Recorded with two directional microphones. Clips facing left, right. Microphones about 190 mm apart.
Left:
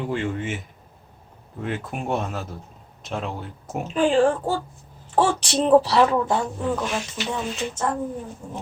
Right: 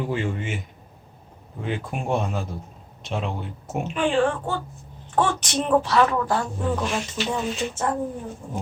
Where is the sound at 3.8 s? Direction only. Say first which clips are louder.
Left 3 dB; 35° left (ahead or behind).